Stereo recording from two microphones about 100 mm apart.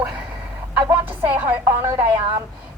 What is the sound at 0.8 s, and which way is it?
Speech, 20° right (ahead or behind).